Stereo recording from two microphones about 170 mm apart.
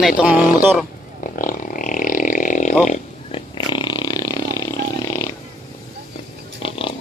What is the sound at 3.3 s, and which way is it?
Roar, 30° left (ahead or behind).